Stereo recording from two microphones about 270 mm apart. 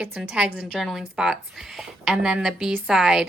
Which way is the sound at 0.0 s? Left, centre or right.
Centre.